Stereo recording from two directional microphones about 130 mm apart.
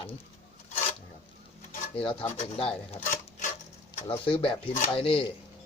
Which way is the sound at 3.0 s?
75° left (ahead or behind).